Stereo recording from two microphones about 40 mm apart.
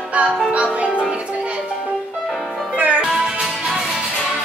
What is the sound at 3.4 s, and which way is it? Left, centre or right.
Music, centre.